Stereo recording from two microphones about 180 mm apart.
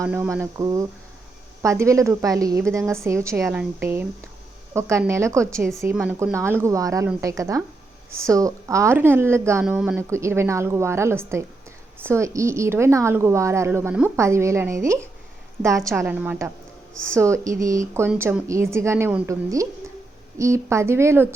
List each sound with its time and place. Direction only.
0.0 s a woman's voice: 10° right (ahead or behind)
9.6 s speech: 5° right (ahead or behind)
10.0 s a woman's voice: 15° right (ahead or behind)